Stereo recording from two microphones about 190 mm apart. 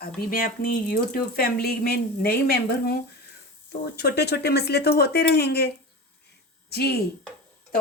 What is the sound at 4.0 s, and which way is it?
Speech, 60° left (ahead or behind).